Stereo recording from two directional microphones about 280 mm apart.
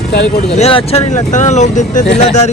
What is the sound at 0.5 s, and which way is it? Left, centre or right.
Speech, left.